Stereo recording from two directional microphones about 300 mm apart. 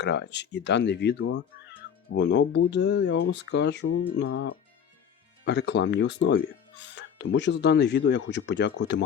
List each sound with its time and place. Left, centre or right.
0.0 s speech: left
3.8 s speech: left